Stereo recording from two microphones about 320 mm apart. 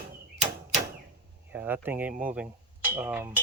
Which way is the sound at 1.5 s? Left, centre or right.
Centre.